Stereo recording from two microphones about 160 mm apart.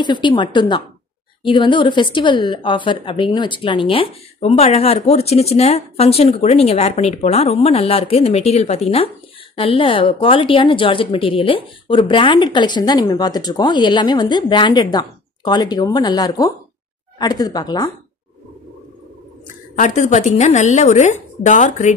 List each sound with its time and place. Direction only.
0.0 s a woman's voice: 30° left (ahead or behind)
19.7 s speech: 50° left (ahead or behind)